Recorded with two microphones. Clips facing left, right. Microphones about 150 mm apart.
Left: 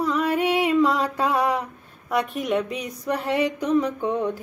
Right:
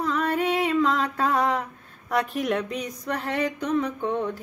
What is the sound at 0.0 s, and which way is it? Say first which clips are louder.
Female singing: left 2 dB; 5° left (ahead or behind).